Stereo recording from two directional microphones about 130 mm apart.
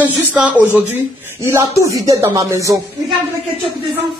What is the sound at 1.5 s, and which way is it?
Speech, 25° right (ahead or behind).